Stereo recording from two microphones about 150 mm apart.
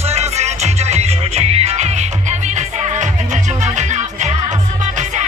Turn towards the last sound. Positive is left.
turn(degrees=-55)  # may be behind; listen again after turning